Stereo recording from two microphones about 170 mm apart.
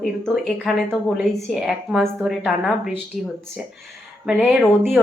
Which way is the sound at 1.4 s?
5° right (ahead or behind).